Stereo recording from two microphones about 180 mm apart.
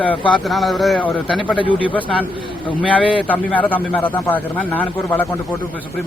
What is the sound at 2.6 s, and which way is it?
Speech, 30° left (ahead or behind).